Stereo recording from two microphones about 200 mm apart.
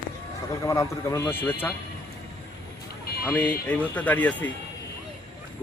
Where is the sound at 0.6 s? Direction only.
15° left (ahead or behind).